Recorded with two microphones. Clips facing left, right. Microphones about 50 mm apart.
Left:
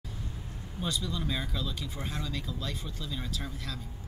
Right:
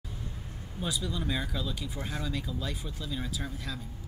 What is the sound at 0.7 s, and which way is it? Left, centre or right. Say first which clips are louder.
Speech: even; centre.